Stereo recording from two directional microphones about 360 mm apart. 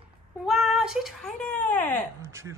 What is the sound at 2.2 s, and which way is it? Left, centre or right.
Speech, centre.